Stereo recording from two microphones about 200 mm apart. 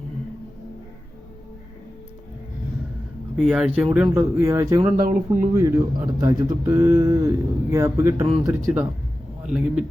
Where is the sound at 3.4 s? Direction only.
5° right (ahead or behind).